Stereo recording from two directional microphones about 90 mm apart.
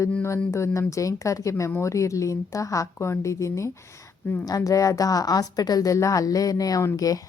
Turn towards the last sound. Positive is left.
turn(degrees=40)  # may be behind; listen again after turning